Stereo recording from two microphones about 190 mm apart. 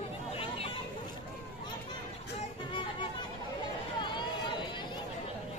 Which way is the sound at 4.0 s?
25° left (ahead or behind).